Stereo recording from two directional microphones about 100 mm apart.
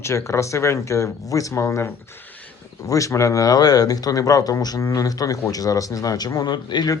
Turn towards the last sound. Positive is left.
turn(degrees=45)  # may be behind; listen again after turning